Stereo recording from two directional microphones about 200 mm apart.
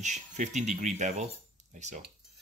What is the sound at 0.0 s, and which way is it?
Speech, 35° right (ahead or behind).